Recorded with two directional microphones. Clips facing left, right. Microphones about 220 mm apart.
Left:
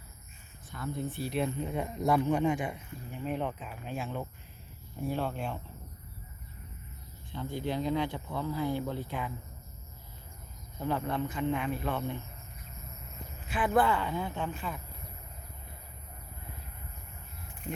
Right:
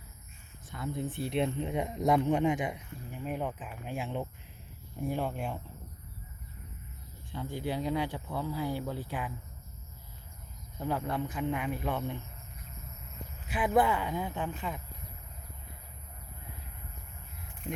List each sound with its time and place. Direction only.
0.7 s speech: 20° right (ahead or behind)
7.4 s speech: 10° right (ahead or behind)
10.8 s speech: 10° right (ahead or behind)
13.5 s speech: 10° right (ahead or behind)